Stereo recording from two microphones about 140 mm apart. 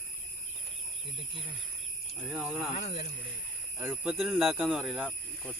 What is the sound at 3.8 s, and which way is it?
Speech, 15° right (ahead or behind).